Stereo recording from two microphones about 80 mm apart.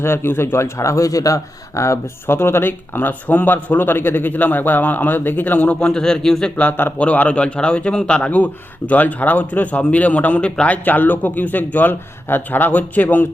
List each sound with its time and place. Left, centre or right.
0.0 s speech: left
5.9 s speech: centre
6.6 s speech: left